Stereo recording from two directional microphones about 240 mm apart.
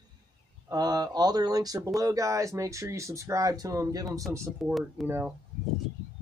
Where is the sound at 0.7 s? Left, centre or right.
Centre.